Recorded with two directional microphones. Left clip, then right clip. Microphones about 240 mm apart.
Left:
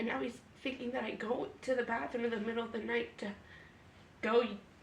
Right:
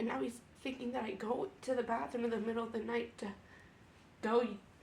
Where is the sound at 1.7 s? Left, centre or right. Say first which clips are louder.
Left 1 dB; centre.